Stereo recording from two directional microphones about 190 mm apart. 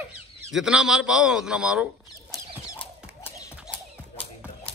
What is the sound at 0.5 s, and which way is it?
A man's voice, 5° right (ahead or behind).